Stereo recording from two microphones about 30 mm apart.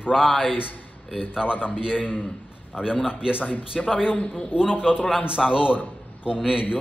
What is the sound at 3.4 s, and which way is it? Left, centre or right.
Speech, left.